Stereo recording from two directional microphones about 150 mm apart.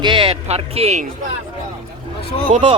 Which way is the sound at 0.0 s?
35° right (ahead or behind).